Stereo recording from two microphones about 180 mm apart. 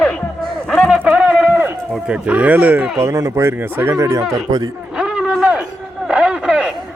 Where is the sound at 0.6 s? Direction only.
Centre (ahead or behind).